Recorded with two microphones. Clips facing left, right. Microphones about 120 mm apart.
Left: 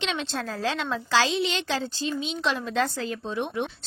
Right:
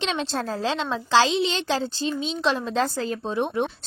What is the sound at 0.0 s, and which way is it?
A woman's voice, 35° right (ahead or behind).